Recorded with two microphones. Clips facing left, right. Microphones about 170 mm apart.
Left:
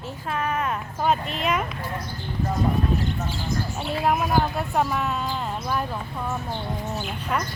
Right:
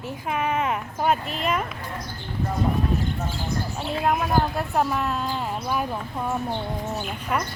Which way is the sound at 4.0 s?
5° left (ahead or behind).